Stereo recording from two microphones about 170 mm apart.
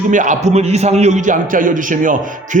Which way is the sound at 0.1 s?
50° right (ahead or behind).